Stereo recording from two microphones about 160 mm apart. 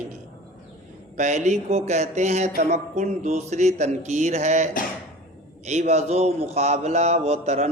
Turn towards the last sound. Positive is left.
turn(degrees=-45)  # may be behind; listen again after turning